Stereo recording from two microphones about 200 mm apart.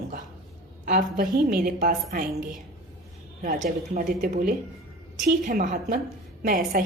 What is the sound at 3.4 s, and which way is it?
A woman's voice, 40° right (ahead or behind).